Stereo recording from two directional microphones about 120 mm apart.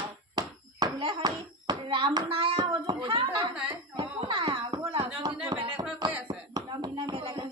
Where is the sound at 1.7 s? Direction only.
40° right (ahead or behind).